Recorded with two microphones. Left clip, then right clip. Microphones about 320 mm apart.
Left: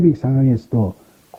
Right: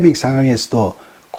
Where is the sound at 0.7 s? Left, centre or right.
Right.